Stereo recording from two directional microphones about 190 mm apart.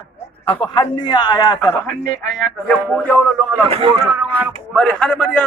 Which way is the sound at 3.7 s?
25° right (ahead or behind).